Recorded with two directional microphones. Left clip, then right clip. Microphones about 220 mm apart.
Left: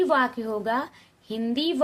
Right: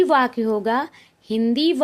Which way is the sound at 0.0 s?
35° right (ahead or behind).